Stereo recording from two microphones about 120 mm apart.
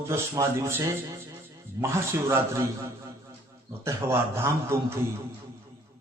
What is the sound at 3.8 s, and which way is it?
A man's voice, 20° right (ahead or behind).